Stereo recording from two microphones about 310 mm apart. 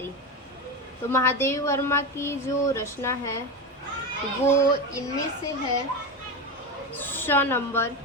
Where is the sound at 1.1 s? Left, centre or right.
Centre.